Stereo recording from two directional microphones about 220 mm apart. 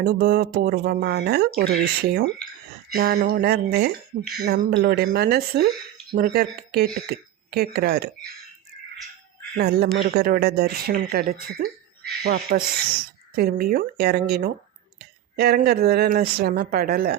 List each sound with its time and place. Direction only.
0.0 s speech: 45° right (ahead or behind)
9.6 s speech: 45° right (ahead or behind)